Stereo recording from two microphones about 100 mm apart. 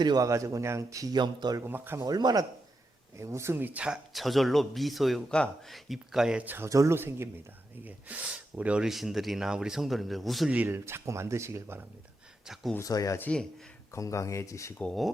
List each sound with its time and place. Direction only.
0.0 s a man's voice: 45° right (ahead or behind)
0.3 s speech: 30° right (ahead or behind)
1.5 s speech: 20° right (ahead or behind)
2.0 s speech: 40° right (ahead or behind)
3.2 s speech: 30° right (ahead or behind)
6.7 s speech: 30° right (ahead or behind); by 10.5 s centre (ahead or behind)
10.5 s speech: 15° right (ahead or behind)
10.8 s speech: 25° right (ahead or behind)
12.8 s speech: 35° left (ahead or behind)